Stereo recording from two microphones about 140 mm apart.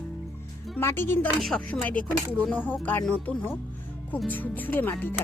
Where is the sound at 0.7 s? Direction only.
15° left (ahead or behind).